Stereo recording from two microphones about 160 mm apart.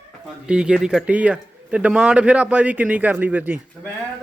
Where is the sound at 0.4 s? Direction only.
5° right (ahead or behind).